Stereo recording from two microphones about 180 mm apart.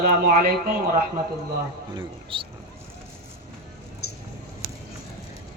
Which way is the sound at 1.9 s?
30° right (ahead or behind).